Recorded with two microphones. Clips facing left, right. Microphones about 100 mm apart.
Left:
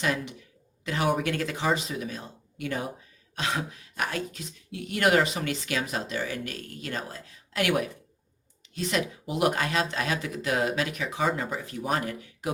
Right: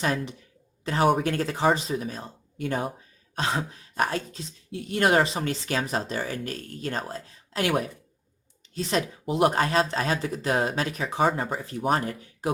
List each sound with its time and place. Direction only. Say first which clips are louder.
0.0 s speech: right 2 dB; 35° right (ahead or behind)